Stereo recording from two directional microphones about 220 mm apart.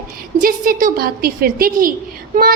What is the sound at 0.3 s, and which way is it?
A woman's voice, 40° right (ahead or behind).